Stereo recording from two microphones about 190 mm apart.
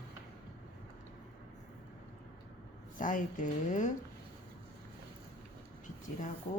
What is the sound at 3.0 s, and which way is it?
Speech, 45° left (ahead or behind).